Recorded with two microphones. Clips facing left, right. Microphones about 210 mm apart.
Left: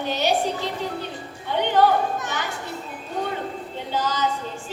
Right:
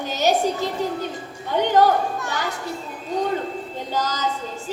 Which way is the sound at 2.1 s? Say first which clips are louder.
Right 1 dB; 20° left (ahead or behind).